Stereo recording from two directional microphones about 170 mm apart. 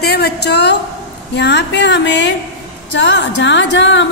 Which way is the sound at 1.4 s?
85° left.